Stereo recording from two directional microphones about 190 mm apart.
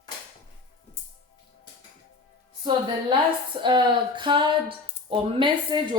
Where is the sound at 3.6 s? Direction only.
25° right (ahead or behind).